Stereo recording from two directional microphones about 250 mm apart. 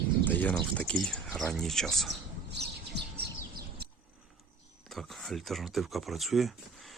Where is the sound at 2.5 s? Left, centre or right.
Right.